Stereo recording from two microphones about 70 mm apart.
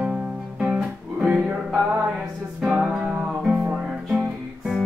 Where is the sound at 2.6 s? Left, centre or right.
Centre.